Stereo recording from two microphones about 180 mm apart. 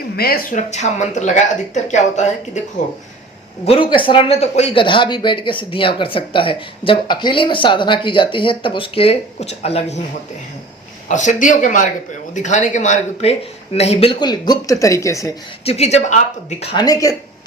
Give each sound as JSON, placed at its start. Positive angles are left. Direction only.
{"t": 0.2, "sound": "speech", "side_deg": 55}
{"t": 0.7, "sound": "speech", "side_deg": 40}
{"t": 3.7, "sound": "speech", "side_deg": 30}
{"t": 11.1, "sound": "speech", "side_deg": 40}
{"t": 15.6, "sound": "speech", "side_deg": 35}
{"t": 16.7, "sound": "speech", "side_deg": 20}